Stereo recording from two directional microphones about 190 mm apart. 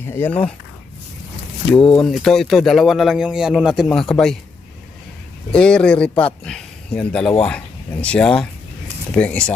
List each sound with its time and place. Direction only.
0.0 s speech: 10° left (ahead or behind)
1.7 s speech: 5° left (ahead or behind)
5.5 s speech: 5° left (ahead or behind)